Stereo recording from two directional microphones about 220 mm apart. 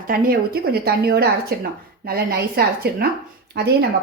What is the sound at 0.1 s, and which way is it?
A woman's voice, 45° right (ahead or behind).